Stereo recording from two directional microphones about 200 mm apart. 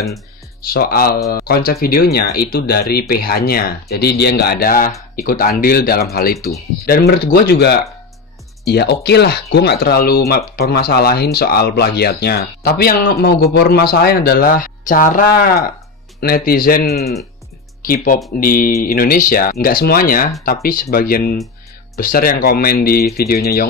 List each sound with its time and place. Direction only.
0.6 s speech: 50° left (ahead or behind)